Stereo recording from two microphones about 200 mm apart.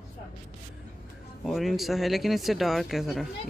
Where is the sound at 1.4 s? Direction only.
Centre (ahead or behind).